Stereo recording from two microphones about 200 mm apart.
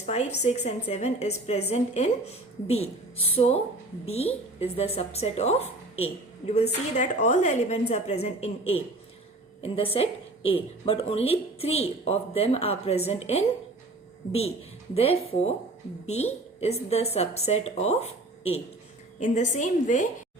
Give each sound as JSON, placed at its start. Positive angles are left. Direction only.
{"t": 0.0, "sound": "a woman's voice", "side_deg": 35}
{"t": 14.9, "sound": "a woman's voice", "side_deg": 30}